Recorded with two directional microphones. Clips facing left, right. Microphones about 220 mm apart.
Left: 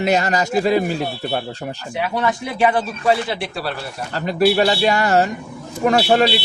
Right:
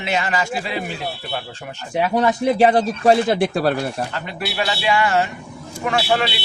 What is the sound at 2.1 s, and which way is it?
Speech, 40° right (ahead or behind).